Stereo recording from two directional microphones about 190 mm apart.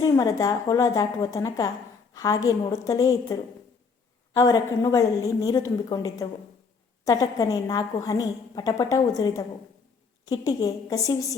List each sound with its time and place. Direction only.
0.0 s a woman's voice: 20° left (ahead or behind)